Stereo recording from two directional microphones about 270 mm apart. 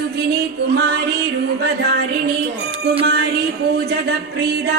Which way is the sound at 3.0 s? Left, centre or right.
Right.